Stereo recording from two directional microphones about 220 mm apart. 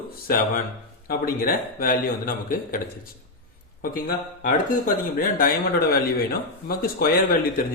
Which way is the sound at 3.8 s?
40° left (ahead or behind).